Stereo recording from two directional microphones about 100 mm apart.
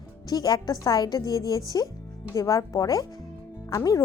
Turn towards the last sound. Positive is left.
turn(degrees=35)  # may be behind; listen again after turning